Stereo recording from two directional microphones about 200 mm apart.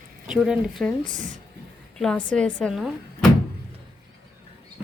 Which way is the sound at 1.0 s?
40° right (ahead or behind).